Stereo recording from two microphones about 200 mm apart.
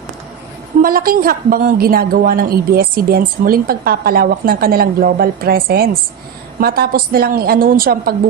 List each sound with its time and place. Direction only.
0.8 s a woman's voice: 45° right (ahead or behind)